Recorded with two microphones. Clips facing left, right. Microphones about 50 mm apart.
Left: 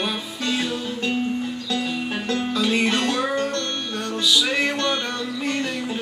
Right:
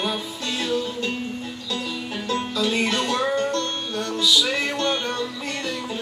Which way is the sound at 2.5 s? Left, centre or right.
Left.